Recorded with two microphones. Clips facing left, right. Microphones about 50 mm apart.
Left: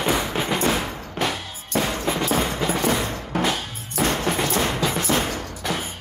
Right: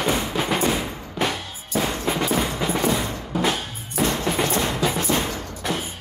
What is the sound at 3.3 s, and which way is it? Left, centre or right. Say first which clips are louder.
Music: even; left.